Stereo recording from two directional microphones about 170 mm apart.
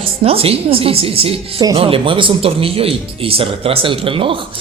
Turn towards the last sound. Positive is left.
turn(degrees=-30)  # may be behind; listen again after turning